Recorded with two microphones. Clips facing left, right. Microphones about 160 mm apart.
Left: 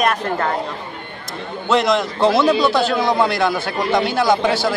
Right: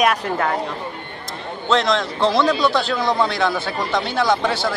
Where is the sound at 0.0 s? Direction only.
5° right (ahead or behind).